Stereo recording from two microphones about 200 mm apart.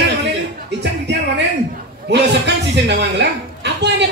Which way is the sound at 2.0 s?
60° right (ahead or behind).